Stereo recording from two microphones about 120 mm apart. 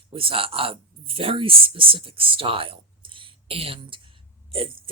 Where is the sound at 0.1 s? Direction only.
50° right (ahead or behind).